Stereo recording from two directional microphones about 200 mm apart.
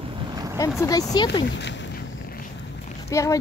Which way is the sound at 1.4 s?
60° left (ahead or behind).